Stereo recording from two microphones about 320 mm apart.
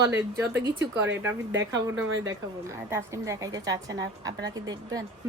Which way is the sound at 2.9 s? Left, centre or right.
Centre.